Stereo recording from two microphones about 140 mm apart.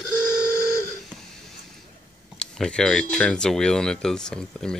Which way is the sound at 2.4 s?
5° left (ahead or behind).